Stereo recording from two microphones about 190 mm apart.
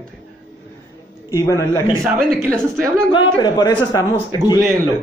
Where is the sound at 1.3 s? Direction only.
15° left (ahead or behind).